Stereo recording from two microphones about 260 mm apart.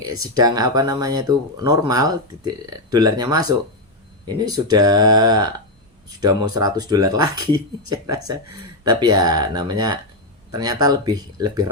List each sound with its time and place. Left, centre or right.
0.2 s speech: centre
6.6 s speech: centre